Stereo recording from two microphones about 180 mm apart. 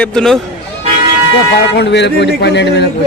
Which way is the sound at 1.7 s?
70° left (ahead or behind).